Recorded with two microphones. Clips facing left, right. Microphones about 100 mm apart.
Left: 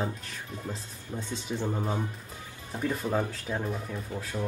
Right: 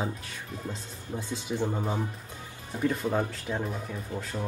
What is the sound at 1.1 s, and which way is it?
Speech, 10° right (ahead or behind).